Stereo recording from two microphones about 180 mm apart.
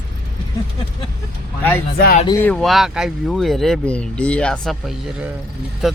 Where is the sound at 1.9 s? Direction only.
60° left (ahead or behind).